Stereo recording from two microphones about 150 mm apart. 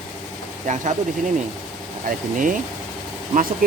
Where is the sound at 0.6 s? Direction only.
55° right (ahead or behind).